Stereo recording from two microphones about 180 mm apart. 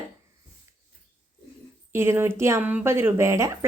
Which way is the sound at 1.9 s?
15° right (ahead or behind).